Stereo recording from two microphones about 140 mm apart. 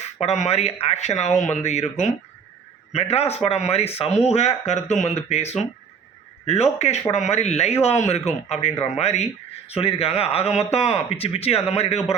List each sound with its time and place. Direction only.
0.2 s speech: 50° left (ahead or behind)
2.9 s speech: 50° left (ahead or behind)